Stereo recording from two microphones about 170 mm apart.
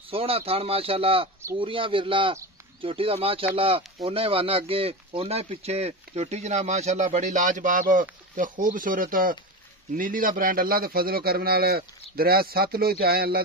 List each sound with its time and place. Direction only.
0.1 s a man's voice: 35° right (ahead or behind); by 13.4 s 65° right (ahead or behind)